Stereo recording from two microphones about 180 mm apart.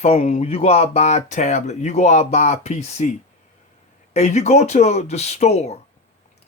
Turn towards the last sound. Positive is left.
turn(degrees=35)  # may be behind; listen again after turning